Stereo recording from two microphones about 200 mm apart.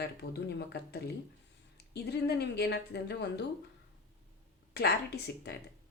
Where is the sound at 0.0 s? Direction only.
55° left (ahead or behind).